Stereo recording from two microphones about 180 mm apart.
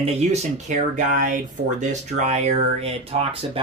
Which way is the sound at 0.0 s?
35° right (ahead or behind).